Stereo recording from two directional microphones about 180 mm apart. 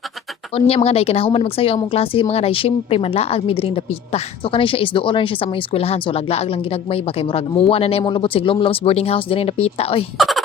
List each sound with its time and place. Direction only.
0.5 s a woman's voice: 35° left (ahead or behind)
10.2 s speech: centre (ahead or behind)